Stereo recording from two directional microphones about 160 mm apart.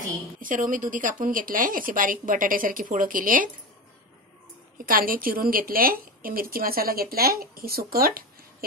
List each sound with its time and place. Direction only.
0.4 s a woman's voice: 55° right (ahead or behind)
4.7 s a woman's voice: 60° right (ahead or behind)